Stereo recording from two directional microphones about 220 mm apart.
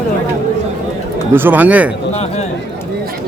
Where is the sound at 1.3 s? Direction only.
10° right (ahead or behind).